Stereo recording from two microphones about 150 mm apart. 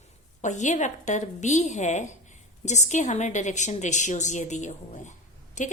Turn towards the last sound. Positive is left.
turn(degrees=55)  # may be behind; listen again after turning